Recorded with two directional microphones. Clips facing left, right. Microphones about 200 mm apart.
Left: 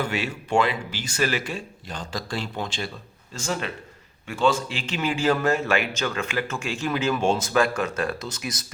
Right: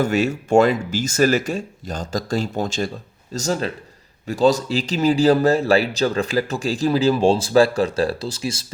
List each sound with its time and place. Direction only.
0.0 s a man's voice: 45° right (ahead or behind)